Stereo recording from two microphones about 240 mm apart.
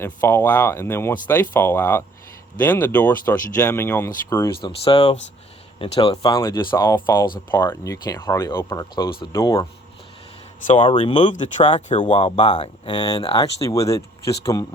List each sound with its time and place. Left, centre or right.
0.0 s speech: centre
4.8 s speech: left
10.7 s speech: left